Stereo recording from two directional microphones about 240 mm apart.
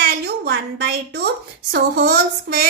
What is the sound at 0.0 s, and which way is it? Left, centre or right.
A woman's voice, right.